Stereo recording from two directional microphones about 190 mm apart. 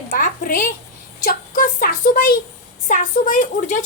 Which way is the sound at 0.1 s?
45° left (ahead or behind).